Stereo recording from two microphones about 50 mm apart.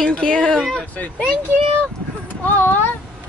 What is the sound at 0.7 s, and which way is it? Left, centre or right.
Speech, left.